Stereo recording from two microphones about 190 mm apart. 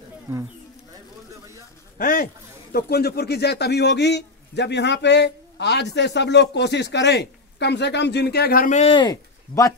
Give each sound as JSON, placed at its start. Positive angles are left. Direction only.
{"t": 0.3, "sound": "speech", "side_deg": -15}
{"t": 2.0, "sound": "a sound", "side_deg": 50}
{"t": 2.7, "sound": "a man's voice", "side_deg": 55}